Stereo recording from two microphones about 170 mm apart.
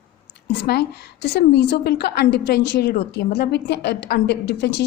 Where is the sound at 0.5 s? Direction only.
75° left (ahead or behind).